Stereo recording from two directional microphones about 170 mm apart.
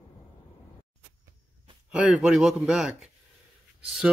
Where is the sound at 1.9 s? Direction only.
5° right (ahead or behind).